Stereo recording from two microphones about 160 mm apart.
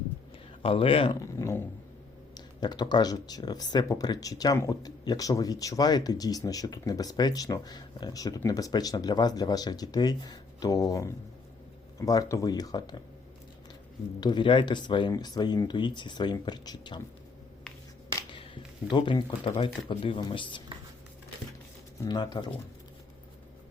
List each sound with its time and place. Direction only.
0.6 s speech: 35° left (ahead or behind)
1.2 s speech: 20° left (ahead or behind)
14.2 s speech: 30° left (ahead or behind)
18.5 s speech: 30° left (ahead or behind)
22.0 s speech: 25° left (ahead or behind)